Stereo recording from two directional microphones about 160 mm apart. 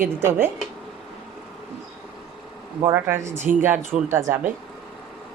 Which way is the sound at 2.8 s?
15° right (ahead or behind).